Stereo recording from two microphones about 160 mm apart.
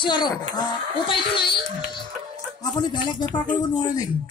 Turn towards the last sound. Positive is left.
turn(degrees=25)  # may be behind; listen again after turning